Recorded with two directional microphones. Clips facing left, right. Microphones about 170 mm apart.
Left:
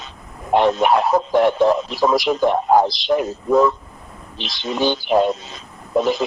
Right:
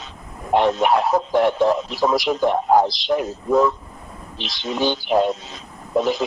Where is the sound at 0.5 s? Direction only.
85° left.